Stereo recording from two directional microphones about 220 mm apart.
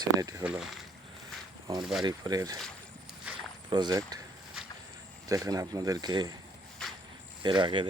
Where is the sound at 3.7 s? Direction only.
20° right (ahead or behind).